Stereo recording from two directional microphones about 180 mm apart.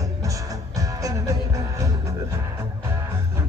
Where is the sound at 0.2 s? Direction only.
20° right (ahead or behind).